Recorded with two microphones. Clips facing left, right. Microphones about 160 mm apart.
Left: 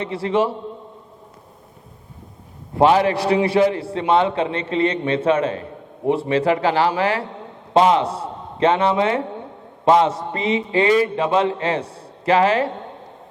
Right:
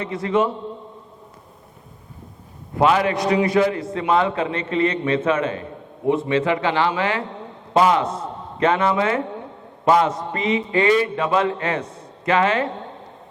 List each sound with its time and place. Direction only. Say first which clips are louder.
0.0 s a man's voice: left 1 dB; 30° left (ahead or behind)
2.7 s a man's voice: left 3 dB; 30° left (ahead or behind)